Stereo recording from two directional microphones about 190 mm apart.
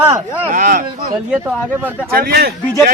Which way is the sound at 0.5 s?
50° right (ahead or behind).